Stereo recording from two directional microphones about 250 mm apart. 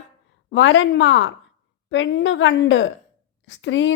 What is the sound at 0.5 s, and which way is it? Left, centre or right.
A woman's voice, left.